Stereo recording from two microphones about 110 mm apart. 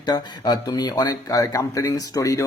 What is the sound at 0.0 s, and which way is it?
Speech, 40° left (ahead or behind).